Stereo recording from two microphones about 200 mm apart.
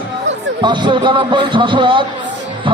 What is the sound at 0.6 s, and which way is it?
Speech, 25° right (ahead or behind).